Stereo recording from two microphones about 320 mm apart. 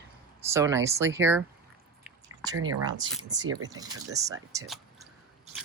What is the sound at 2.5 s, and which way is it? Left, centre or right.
Speech, right.